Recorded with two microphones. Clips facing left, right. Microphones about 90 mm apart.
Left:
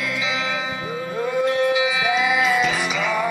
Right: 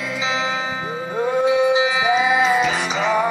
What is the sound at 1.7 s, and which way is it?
Music, 25° right (ahead or behind).